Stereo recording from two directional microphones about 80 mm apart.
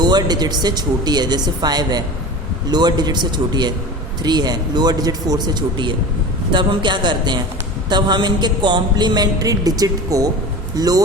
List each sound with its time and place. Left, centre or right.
0.0 s speech: right
6.5 s a man's voice: right